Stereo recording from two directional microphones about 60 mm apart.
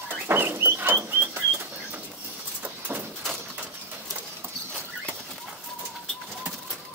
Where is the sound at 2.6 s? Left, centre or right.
Right.